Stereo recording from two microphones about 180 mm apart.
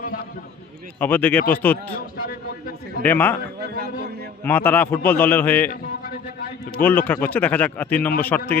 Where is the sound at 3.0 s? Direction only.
10° left (ahead or behind).